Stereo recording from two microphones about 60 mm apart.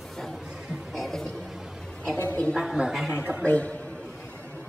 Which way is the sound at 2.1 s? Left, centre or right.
Left.